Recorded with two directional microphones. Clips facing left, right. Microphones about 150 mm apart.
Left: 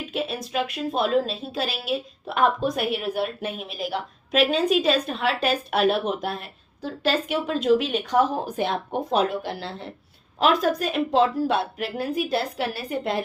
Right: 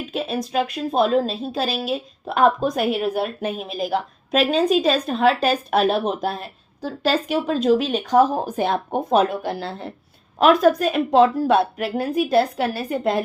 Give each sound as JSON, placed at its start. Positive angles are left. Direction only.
{"t": 0.1, "sound": "a woman's voice", "side_deg": -40}